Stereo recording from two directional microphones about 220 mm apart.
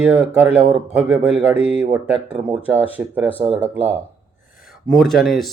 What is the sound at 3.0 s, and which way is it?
Speech, 10° right (ahead or behind).